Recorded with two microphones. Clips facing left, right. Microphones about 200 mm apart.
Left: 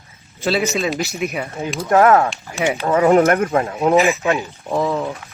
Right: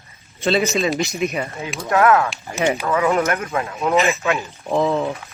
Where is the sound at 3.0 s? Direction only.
45° left (ahead or behind).